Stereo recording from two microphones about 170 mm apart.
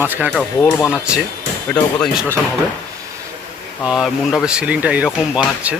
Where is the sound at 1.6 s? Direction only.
10° left (ahead or behind).